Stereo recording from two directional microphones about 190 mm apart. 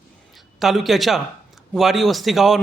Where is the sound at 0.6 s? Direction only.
Centre (ahead or behind).